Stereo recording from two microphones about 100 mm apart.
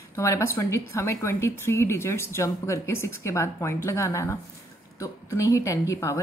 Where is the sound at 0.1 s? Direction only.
30° left (ahead or behind).